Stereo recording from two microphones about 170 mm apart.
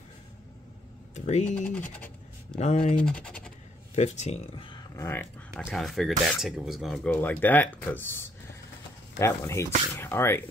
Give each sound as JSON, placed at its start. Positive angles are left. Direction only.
{"t": 1.1, "sound": "speech", "side_deg": 45}
{"t": 1.7, "sound": "speech", "side_deg": 10}
{"t": 2.6, "sound": "speech", "side_deg": 40}
{"t": 3.0, "sound": "speech", "side_deg": 5}
{"t": 3.9, "sound": "speech", "side_deg": 40}
{"t": 4.9, "sound": "speech", "side_deg": 15}
{"t": 5.7, "sound": "speech", "side_deg": 0}